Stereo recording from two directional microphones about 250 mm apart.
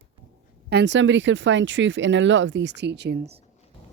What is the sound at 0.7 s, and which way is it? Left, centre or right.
Speech, right.